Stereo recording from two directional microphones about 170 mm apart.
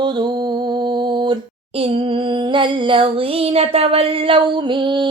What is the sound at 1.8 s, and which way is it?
Female singing, 35° right (ahead or behind).